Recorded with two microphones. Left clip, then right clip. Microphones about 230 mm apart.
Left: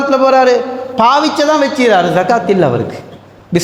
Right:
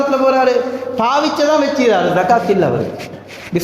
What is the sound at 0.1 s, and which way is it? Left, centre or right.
A man's voice, left.